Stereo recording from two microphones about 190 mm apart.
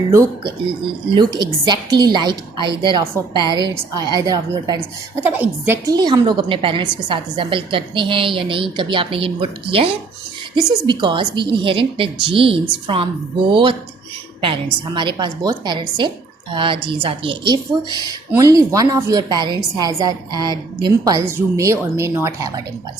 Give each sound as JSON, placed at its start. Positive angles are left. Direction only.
{"t": 0.1, "sound": "a woman's voice", "side_deg": -15}
{"t": 5.2, "sound": "a woman's voice", "side_deg": -10}